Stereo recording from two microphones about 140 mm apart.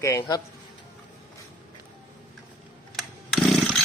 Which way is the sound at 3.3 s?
Centre (ahead or behind).